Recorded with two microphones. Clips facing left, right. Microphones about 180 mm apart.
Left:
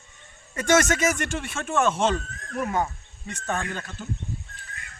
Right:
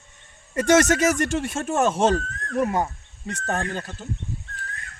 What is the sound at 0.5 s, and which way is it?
Speech, 35° right (ahead or behind).